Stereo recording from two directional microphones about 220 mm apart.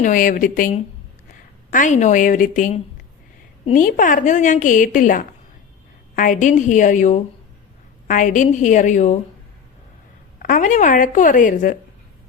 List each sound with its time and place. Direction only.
0.0 s a woman's voice: 35° left (ahead or behind)
10.4 s a woman's voice: 35° left (ahead or behind)